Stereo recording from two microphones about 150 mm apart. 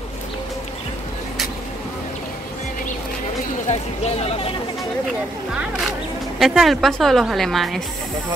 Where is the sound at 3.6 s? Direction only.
45° left (ahead or behind).